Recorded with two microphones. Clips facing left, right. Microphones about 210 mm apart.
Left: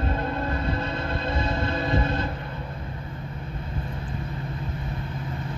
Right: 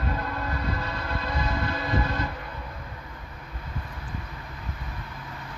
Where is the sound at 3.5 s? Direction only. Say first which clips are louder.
Left 4 dB; 25° left (ahead or behind).